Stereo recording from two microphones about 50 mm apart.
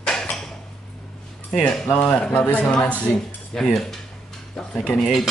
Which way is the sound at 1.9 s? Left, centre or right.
Left.